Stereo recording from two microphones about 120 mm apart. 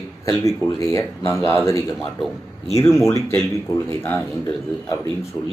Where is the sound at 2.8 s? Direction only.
20° left (ahead or behind).